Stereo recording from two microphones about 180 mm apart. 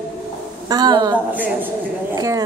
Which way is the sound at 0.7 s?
20° right (ahead or behind).